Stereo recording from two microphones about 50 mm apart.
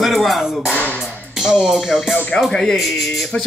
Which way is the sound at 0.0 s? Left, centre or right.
Centre.